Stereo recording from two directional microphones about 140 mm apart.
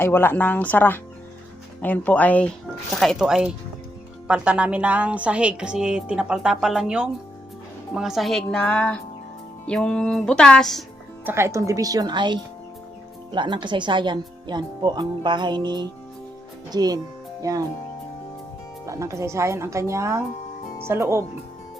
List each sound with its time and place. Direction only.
0.0 s a woman's voice: 15° left (ahead or behind)
11.3 s speech: 20° right (ahead or behind)
18.9 s speech: 20° right (ahead or behind)